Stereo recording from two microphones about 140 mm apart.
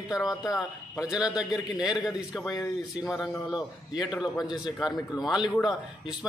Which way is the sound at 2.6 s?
20° left (ahead or behind).